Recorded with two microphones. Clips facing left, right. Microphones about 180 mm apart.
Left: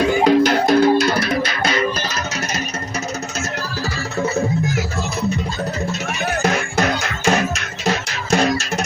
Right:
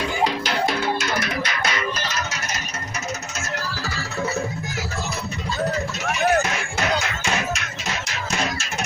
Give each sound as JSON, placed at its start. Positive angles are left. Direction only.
{"t": 0.3, "sound": "music", "side_deg": 50}
{"t": 6.4, "sound": "music", "side_deg": 40}